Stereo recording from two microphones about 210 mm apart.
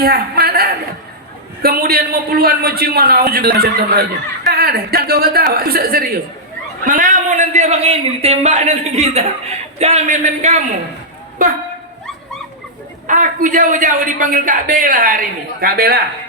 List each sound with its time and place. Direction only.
0.0 s a sound: 45° right (ahead or behind)
1.6 s a man's voice: 45° right (ahead or behind)
13.1 s a man's voice: 40° right (ahead or behind)